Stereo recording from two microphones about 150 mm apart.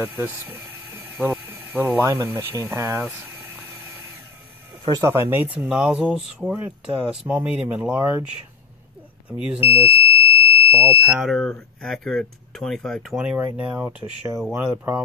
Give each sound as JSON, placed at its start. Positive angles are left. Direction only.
{"t": 0.0, "sound": "speech", "side_deg": -15}
{"t": 4.8, "sound": "speech", "side_deg": -20}
{"t": 9.4, "sound": "speech", "side_deg": -10}
{"t": 10.0, "sound": "alarm", "side_deg": 35}
{"t": 10.7, "sound": "speech", "side_deg": -20}
{"t": 11.1, "sound": "speech", "side_deg": 0}
{"t": 13.6, "sound": "speech", "side_deg": -20}